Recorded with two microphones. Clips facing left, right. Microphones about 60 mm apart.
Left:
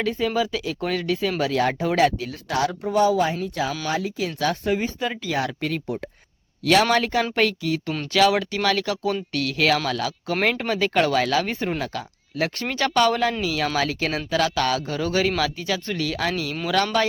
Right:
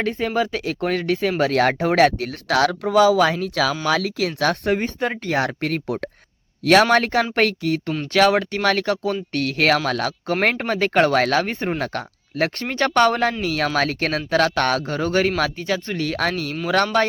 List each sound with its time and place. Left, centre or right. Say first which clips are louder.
0.0 s speech: right 1 dB; right
4.4 s speech: right 2 dB; right
6.9 s speech: right 3 dB; right